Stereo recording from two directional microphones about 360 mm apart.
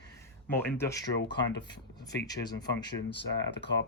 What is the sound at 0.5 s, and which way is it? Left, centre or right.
Speech, centre.